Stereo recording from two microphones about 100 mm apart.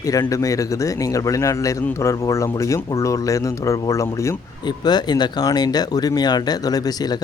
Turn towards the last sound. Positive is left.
turn(degrees=40)  # may be behind; listen again after turning